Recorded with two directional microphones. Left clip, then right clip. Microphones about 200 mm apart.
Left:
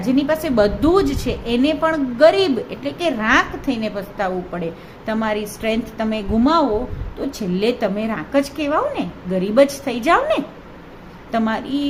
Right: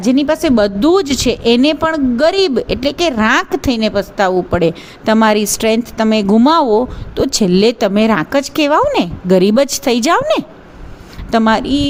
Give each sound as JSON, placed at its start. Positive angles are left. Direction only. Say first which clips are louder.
{"t": 0.0, "sound": "a woman's voice", "louder": "right 6 dB", "side_deg": -40}